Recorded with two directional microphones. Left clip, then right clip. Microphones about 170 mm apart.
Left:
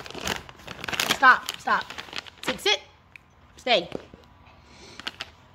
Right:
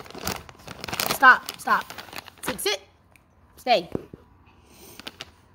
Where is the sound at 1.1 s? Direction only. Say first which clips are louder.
Right 2 dB; 25° right (ahead or behind).